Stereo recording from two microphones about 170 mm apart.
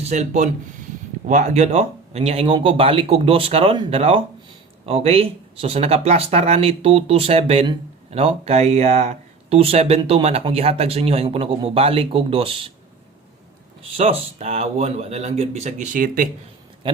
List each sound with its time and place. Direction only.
0.0 s speech: 40° right (ahead or behind)
13.9 s speech: 35° right (ahead or behind); by 16.3 s 55° right (ahead or behind)
16.8 s speech: 30° right (ahead or behind)